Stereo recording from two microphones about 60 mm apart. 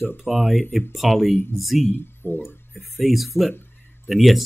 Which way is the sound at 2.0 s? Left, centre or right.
Left.